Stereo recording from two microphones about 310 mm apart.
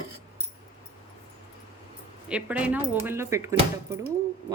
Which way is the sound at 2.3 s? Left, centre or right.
Centre.